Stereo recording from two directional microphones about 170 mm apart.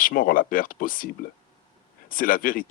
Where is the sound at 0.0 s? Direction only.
55° left (ahead or behind).